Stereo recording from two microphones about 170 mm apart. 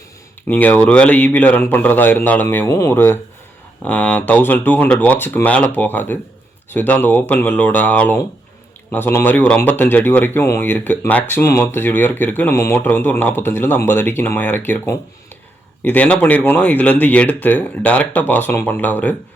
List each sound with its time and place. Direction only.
0.4 s speech: 10° left (ahead or behind)